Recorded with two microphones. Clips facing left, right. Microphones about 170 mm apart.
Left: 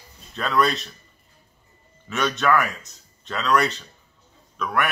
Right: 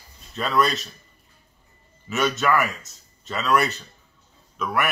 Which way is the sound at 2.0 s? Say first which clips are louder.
Even; 5° right (ahead or behind).